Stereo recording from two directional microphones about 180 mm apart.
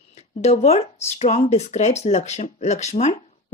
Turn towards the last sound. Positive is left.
turn(degrees=40)  # may be behind; listen again after turning